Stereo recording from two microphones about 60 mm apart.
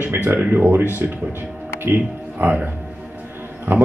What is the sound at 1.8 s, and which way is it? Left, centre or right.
Speech, right.